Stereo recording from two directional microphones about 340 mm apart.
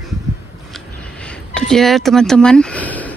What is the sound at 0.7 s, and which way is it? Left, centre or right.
Speech, centre.